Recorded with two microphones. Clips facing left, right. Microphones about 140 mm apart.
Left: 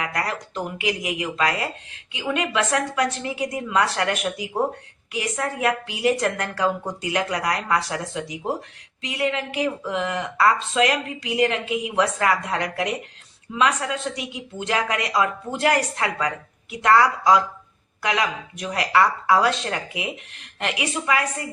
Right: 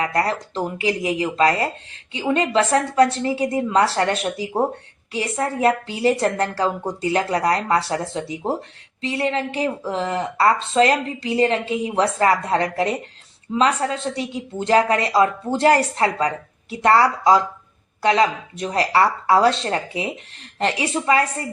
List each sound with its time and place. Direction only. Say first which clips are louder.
0.0 s speech: right 6 dB; 30° right (ahead or behind)